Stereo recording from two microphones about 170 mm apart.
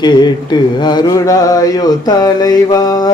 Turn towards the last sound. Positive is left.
turn(degrees=25)  # may be behind; listen again after turning